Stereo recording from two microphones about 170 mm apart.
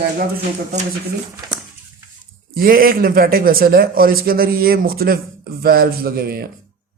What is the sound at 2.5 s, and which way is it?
Speech, 60° right (ahead or behind).